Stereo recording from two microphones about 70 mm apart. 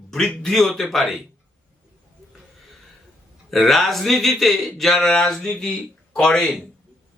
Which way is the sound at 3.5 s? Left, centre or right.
Centre.